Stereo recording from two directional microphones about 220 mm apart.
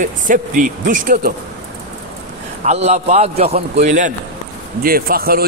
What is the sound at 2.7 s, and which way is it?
A man's voice, 30° right (ahead or behind).